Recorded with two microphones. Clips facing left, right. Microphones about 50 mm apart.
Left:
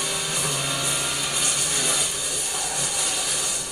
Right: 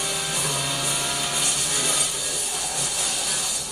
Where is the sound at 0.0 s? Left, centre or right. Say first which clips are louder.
Even; centre.